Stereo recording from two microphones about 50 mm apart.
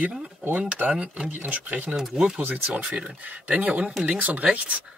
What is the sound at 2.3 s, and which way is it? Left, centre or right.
Speech, right.